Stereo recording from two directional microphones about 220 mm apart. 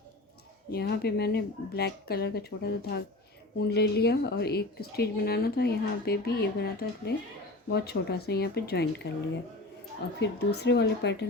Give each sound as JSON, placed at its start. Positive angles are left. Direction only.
{"t": 0.7, "sound": "a woman's voice", "side_deg": 45}
{"t": 10.2, "sound": "a woman's voice", "side_deg": 50}